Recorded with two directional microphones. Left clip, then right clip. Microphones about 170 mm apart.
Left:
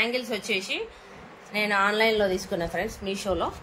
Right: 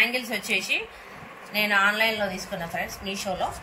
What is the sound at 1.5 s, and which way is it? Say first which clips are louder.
A woman's voice: right 2 dB; 30° left (ahead or behind).